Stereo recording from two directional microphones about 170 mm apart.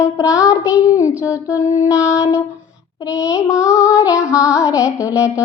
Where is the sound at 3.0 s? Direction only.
20° left (ahead or behind).